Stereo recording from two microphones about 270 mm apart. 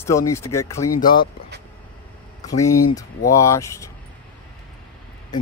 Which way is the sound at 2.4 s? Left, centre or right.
Centre.